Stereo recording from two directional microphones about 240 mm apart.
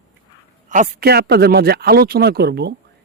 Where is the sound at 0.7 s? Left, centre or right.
Right.